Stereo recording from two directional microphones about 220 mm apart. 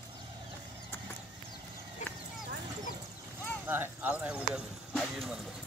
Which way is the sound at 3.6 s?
10° right (ahead or behind).